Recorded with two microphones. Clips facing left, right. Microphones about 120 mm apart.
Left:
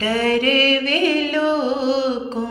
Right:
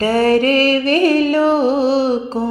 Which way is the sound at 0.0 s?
40° right (ahead or behind).